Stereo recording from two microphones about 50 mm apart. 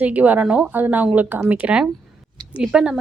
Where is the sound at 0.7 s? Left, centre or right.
Right.